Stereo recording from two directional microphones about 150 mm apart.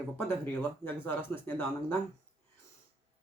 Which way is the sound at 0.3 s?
15° left (ahead or behind).